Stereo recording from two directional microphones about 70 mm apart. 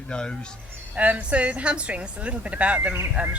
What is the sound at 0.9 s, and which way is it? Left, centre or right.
A woman's voice, right.